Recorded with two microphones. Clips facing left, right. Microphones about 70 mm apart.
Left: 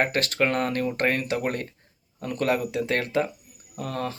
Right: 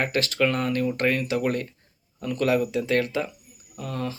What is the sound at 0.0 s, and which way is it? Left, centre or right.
Speech, left.